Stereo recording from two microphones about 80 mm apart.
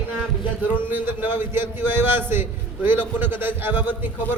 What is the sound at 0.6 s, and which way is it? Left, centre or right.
A man's voice, right.